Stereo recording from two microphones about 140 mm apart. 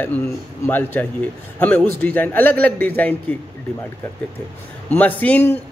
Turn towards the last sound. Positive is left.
turn(degrees=10)  # may be behind; listen again after turning